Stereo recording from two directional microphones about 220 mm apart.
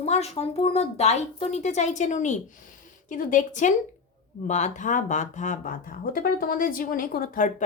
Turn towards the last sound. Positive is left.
turn(degrees=40)  # may be behind; listen again after turning